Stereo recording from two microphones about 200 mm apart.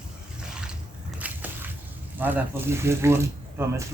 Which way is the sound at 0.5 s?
5° right (ahead or behind).